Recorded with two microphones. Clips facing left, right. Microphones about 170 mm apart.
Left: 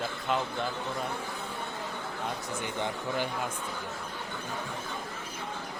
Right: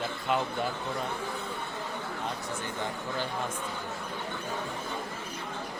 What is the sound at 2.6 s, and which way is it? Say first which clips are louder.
Speech: left 4 dB; 15° left (ahead or behind).